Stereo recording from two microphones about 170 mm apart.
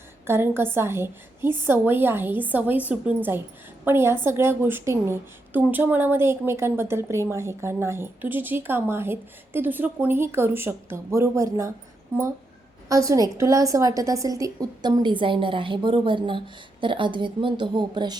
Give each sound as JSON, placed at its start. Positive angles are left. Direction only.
{"t": 0.3, "sound": "a woman's voice", "side_deg": -15}
{"t": 12.9, "sound": "a woman's voice", "side_deg": -20}